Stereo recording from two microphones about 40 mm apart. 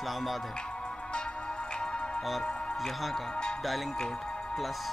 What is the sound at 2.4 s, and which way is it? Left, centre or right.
Music, centre.